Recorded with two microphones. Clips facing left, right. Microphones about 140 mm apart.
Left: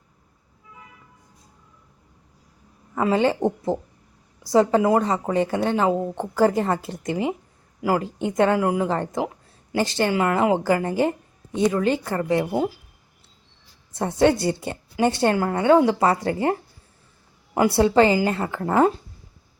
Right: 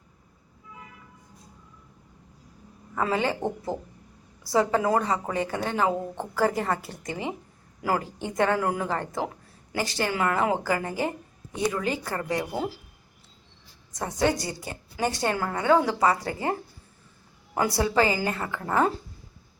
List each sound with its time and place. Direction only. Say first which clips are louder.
2.9 s a woman's voice: left 6 dB; 20° left (ahead or behind)
13.9 s a woman's voice: left 6 dB; 25° left (ahead or behind)
17.5 s a woman's voice: left 7 dB; 20° left (ahead or behind)